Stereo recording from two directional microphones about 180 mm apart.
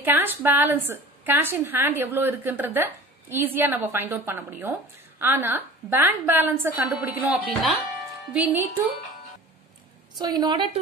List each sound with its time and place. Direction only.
0.0 s a woman's voice: 10° right (ahead or behind)
10.1 s a woman's voice: 25° right (ahead or behind)